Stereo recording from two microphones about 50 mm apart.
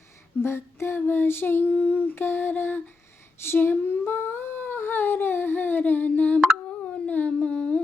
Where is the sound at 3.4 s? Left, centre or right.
Left.